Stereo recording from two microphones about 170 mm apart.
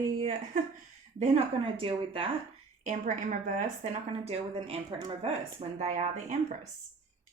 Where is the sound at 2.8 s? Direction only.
50° right (ahead or behind).